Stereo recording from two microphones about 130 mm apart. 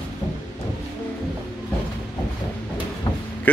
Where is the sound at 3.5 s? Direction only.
10° left (ahead or behind).